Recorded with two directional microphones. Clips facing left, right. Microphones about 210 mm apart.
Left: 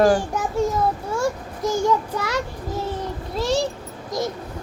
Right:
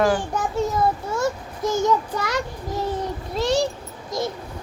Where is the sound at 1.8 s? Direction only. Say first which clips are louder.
Even; 5° left (ahead or behind).